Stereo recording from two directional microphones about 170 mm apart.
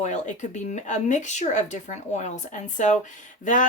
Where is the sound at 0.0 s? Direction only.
45° left (ahead or behind).